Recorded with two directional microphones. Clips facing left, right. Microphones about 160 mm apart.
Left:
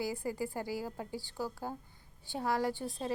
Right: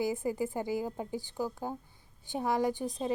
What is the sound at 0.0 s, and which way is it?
A woman's voice, 20° right (ahead or behind).